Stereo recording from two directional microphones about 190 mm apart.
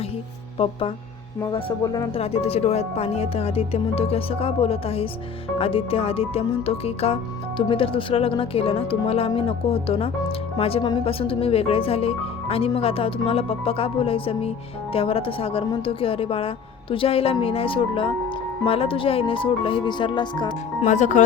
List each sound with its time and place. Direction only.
0.6 s speech: 30° left (ahead or behind)
2.1 s speech: 30° left (ahead or behind)
20.8 s speech: 40° left (ahead or behind)